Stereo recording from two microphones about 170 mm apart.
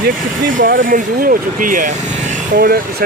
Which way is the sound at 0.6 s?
55° right (ahead or behind).